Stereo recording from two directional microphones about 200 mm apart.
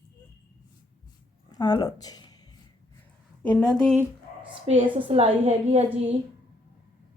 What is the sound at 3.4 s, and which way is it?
Speech, 5° left (ahead or behind).